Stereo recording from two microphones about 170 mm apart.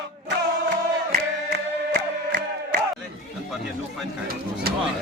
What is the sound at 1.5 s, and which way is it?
Music, 75° right (ahead or behind).